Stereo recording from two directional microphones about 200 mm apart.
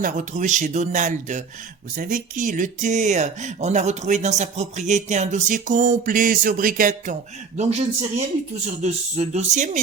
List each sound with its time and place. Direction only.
0.0 s speech: 40° right (ahead or behind)
8.8 s speech: 35° right (ahead or behind)